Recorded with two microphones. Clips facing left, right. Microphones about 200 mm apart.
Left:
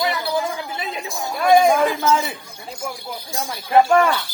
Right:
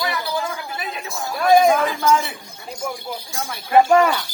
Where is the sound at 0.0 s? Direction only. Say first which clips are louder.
Left 3 dB; 25° left (ahead or behind).